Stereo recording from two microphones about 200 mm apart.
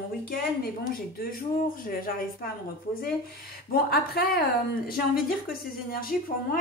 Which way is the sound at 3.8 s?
50° left (ahead or behind).